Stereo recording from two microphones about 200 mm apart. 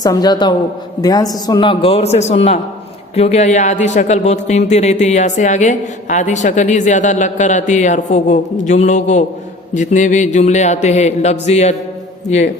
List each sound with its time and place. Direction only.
0.0 s a man's voice: 20° left (ahead or behind); by 11.8 s 35° left (ahead or behind)